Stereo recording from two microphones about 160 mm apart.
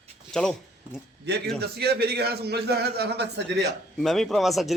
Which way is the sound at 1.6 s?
90° right.